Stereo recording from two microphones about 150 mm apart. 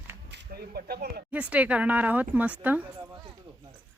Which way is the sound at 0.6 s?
90° right.